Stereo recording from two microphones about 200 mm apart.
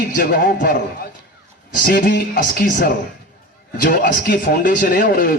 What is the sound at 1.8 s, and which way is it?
A man's voice, 45° left (ahead or behind).